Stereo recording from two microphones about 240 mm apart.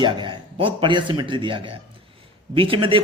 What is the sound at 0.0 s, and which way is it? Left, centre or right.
A man's voice, centre.